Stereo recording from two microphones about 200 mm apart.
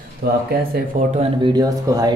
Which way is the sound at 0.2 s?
55° right (ahead or behind).